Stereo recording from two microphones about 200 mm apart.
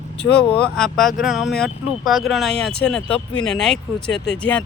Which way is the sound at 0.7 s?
Centre (ahead or behind).